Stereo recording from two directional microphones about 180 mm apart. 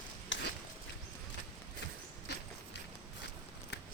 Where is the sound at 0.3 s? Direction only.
90° left.